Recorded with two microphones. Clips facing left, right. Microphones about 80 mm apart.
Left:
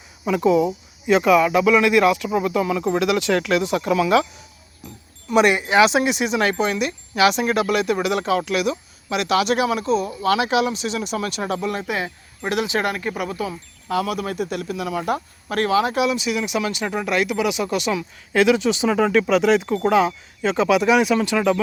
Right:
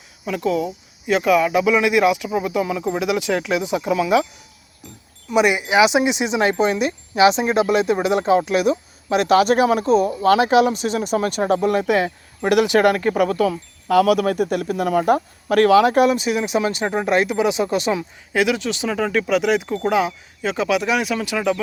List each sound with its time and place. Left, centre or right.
0.3 s speech: centre
5.3 s speech: centre; by 12.5 s right
12.5 s speech: right
18.3 s speech: centre